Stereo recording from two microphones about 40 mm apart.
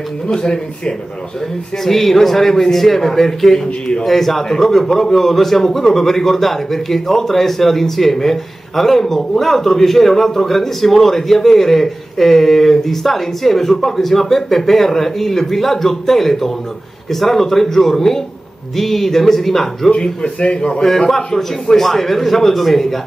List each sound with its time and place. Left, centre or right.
0.3 s speech: centre
1.9 s a man's voice: centre
19.9 s a man's voice: left
20.8 s a man's voice: centre